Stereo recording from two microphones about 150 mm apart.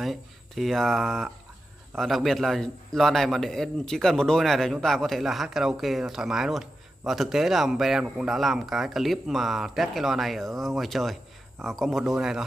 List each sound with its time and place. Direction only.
0.0 s a man's voice: centre (ahead or behind)